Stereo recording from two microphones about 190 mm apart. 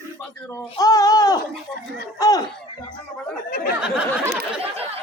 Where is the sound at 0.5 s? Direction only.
15° left (ahead or behind).